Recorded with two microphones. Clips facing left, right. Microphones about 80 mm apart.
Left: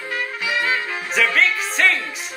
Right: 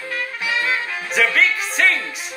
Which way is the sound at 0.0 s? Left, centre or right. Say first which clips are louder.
Even; centre.